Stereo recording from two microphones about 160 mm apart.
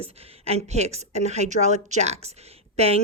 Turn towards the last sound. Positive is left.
turn(degrees=-40)  # may be behind; listen again after turning